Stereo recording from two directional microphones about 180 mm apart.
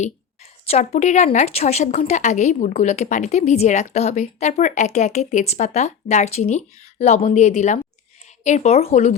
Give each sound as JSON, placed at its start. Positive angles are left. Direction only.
{"t": 0.6, "sound": "a woman's voice", "side_deg": 35}